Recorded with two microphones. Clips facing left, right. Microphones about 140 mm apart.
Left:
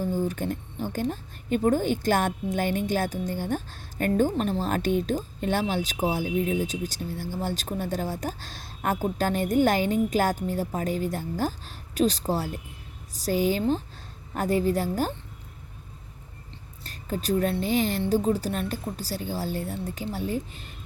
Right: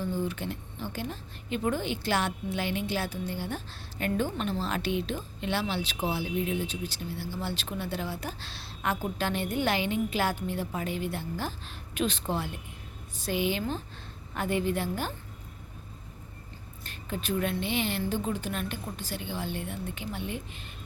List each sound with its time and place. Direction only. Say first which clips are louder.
0.0 s a woman's voice: left 4 dB; 45° left (ahead or behind)
16.8 s a woman's voice: left 5 dB; 40° left (ahead or behind)